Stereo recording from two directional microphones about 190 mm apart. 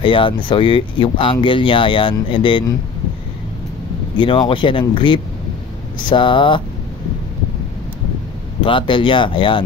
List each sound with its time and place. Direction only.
0.0 s speech: 25° left (ahead or behind)
4.2 s speech: 25° left (ahead or behind)
8.6 s speech: 25° left (ahead or behind)